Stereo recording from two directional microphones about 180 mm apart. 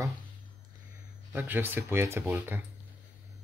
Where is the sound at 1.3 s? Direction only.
10° right (ahead or behind).